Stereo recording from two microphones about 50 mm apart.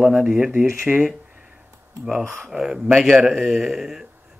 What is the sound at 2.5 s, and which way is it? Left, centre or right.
Speech, centre.